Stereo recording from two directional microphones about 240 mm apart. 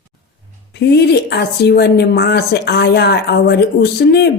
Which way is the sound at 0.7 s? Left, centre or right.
Left.